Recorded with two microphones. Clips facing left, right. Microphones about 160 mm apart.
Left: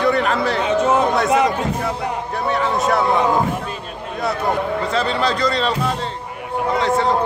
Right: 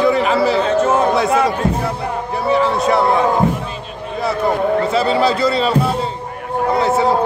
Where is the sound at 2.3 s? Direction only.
5° right (ahead or behind).